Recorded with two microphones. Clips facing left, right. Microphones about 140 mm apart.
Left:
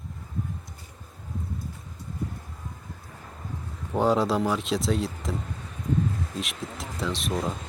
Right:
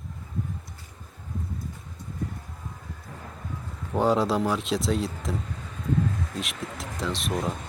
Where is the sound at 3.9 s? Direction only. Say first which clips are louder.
Even; centre (ahead or behind).